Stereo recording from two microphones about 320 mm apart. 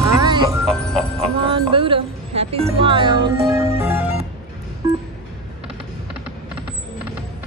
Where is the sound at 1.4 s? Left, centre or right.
Centre.